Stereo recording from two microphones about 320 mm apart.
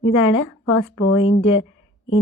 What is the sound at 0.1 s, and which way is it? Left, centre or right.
A woman's voice, left.